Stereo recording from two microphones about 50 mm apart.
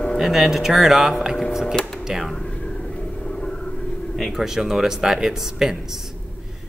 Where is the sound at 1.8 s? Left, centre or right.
Centre.